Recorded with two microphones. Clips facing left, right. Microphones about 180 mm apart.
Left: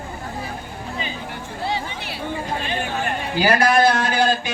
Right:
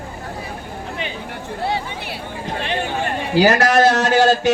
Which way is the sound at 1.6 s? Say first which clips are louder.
Right 2 dB; 55° right (ahead or behind).